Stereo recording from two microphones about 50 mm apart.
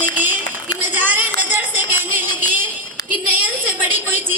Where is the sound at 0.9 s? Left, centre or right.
Right.